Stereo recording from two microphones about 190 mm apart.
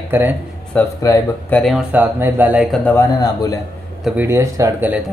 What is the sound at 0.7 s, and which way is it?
Speech, 15° left (ahead or behind).